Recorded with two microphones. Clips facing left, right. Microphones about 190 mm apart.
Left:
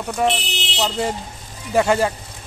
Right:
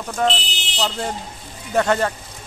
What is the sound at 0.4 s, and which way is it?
Speech, 65° left (ahead or behind).